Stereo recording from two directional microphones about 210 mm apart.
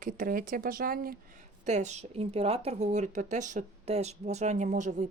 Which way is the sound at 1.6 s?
35° right (ahead or behind).